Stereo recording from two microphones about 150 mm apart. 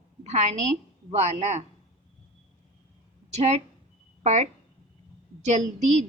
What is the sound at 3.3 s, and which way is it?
A woman's voice, 45° right (ahead or behind).